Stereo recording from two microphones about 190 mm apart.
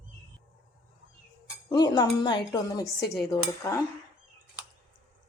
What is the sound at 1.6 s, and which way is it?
A woman's voice, 20° left (ahead or behind).